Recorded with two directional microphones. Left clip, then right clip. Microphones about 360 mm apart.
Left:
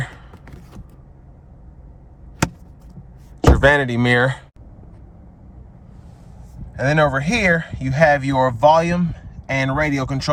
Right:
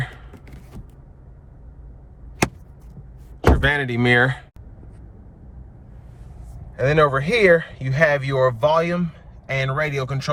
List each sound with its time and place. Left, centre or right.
3.6 s speech: centre
6.7 s speech: centre